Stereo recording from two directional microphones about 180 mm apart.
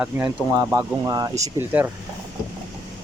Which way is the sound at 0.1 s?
10° right (ahead or behind).